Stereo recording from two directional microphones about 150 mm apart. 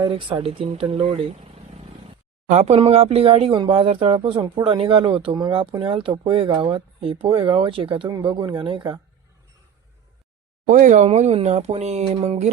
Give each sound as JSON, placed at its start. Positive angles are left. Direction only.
{"t": 0.0, "sound": "speech", "side_deg": -35}
{"t": 10.7, "sound": "speech", "side_deg": -55}